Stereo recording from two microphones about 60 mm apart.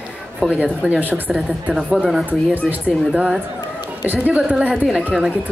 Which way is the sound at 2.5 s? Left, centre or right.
Right.